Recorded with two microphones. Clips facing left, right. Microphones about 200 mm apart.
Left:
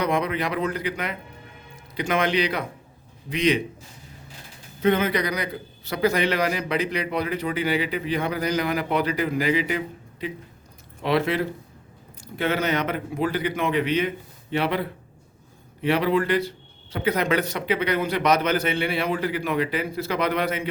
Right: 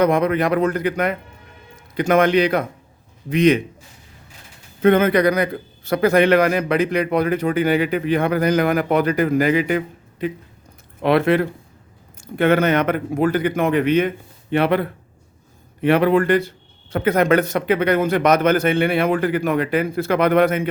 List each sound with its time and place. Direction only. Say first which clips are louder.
0.0 s a man's voice: right 7 dB; 50° right (ahead or behind)
4.8 s a man's voice: right 7 dB; 55° right (ahead or behind)